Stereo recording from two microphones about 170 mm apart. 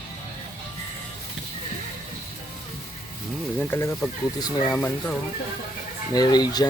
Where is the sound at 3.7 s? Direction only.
15° left (ahead or behind).